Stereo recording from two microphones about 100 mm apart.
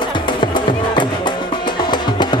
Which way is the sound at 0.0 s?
55° left (ahead or behind).